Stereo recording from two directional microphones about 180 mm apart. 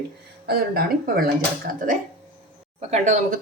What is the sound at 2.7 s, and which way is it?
Speech, 40° right (ahead or behind).